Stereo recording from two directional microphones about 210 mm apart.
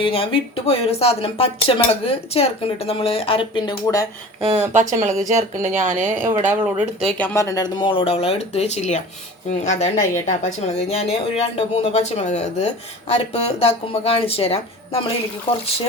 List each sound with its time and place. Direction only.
0.0 s speech: 25° left (ahead or behind)
4.4 s speech: 30° right (ahead or behind)
5.4 s speech: 15° right (ahead or behind)
5.8 s speech: 40° right (ahead or behind)
6.2 s speech: 10° right (ahead or behind)
7.2 s speech: 15° left (ahead or behind)